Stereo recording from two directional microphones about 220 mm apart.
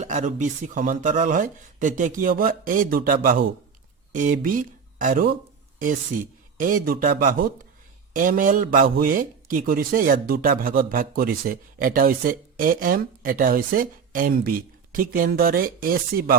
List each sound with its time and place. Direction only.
0.0 s speech: 30° right (ahead or behind)
6.6 s speech: 40° right (ahead or behind)